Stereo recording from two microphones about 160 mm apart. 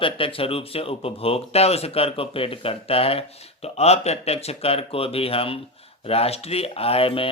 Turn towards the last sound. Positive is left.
turn(degrees=35)  # may be behind; listen again after turning